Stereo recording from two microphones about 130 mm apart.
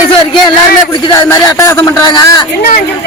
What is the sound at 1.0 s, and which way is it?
Speech, 25° left (ahead or behind).